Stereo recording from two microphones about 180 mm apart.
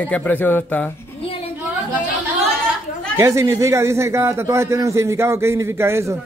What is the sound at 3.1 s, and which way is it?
A man's voice, 15° right (ahead or behind).